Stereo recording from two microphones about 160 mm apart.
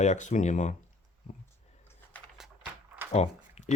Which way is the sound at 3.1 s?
45° left (ahead or behind).